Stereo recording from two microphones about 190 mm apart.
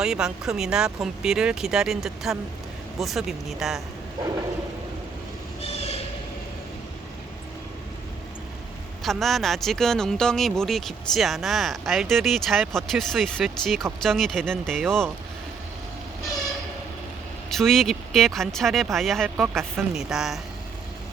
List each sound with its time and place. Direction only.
0.0 s speech: 5° right (ahead or behind)
5.6 s train: 30° left (ahead or behind)
9.0 s speech: centre (ahead or behind)
17.5 s speech: centre (ahead or behind)